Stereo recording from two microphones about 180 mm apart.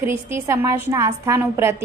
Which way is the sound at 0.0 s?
15° right (ahead or behind).